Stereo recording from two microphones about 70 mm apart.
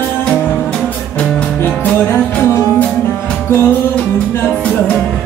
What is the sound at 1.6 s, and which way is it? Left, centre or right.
Music, left.